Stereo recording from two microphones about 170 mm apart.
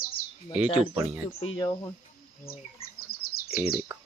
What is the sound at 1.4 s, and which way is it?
Speech, 30° left (ahead or behind).